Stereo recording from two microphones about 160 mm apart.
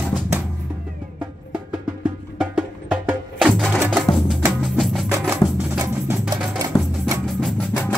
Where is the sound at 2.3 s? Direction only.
5° right (ahead or behind).